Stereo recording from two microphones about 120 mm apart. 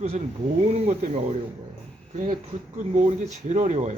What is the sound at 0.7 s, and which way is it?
Speech, 60° right (ahead or behind).